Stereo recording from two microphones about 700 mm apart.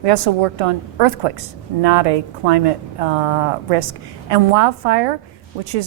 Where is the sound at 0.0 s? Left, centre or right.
Right.